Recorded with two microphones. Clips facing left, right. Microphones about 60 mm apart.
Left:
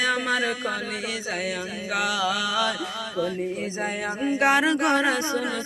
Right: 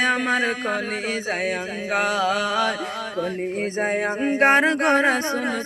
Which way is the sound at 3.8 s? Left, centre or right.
Right.